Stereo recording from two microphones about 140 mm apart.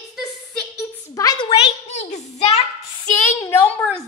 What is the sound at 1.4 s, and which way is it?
A child's voice, 45° left (ahead or behind).